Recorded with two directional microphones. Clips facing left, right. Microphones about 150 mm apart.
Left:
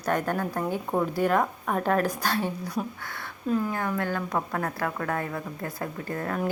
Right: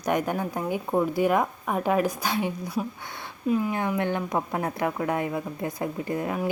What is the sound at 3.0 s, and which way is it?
Speech, 20° right (ahead or behind).